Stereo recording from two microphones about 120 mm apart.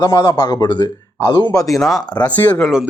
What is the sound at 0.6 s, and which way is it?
Speech, 40° left (ahead or behind).